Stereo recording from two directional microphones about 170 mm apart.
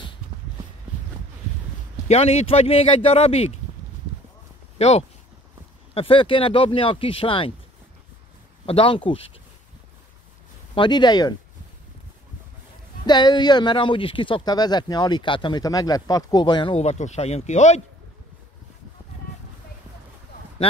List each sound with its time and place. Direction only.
2.0 s speech: 35° left (ahead or behind)
4.7 s speech: 40° left (ahead or behind)
8.6 s speech: 30° left (ahead or behind)
10.7 s speech: 25° left (ahead or behind)
13.0 s speech: 25° left (ahead or behind)
16.7 s speech: 40° left (ahead or behind)